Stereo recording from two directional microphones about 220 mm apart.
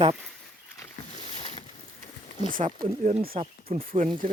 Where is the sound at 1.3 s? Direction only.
30° left (ahead or behind).